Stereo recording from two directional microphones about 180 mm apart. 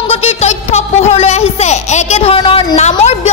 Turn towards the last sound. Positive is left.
turn(degrees=40)  # may be behind; listen again after turning